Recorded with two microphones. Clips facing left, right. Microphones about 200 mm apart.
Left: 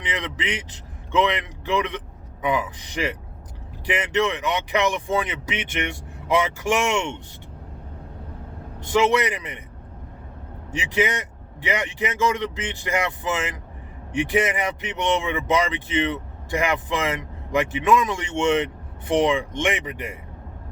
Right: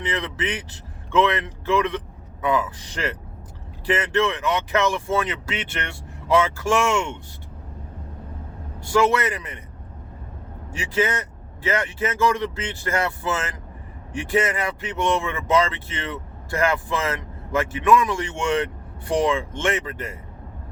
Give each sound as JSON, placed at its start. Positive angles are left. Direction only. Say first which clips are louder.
{"t": 0.0, "sound": "speech", "louder": "right 3 dB", "side_deg": 15}
{"t": 8.8, "sound": "a man's voice", "louder": "even", "side_deg": 20}
{"t": 10.7, "sound": "speech", "louder": "even", "side_deg": 20}